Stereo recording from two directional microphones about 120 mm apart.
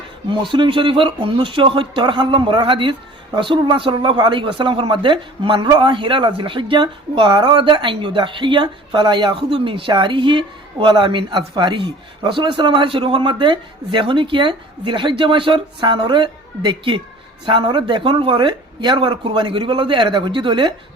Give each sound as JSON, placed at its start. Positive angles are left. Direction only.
{"t": 0.3, "sound": "speech", "side_deg": -45}